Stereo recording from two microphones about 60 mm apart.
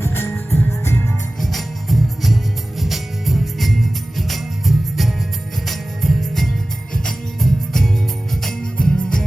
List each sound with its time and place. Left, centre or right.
0.0 s music: left
1.4 s music: centre